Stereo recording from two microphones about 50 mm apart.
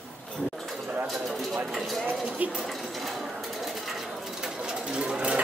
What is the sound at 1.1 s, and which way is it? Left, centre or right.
Speech, centre.